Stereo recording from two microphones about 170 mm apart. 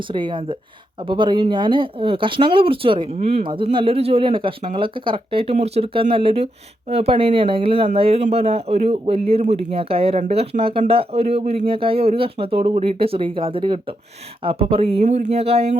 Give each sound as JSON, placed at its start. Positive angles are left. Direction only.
{"t": 0.0, "sound": "speech", "side_deg": -30}